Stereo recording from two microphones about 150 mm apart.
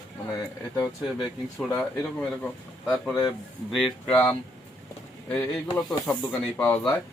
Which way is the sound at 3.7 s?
Centre (ahead or behind).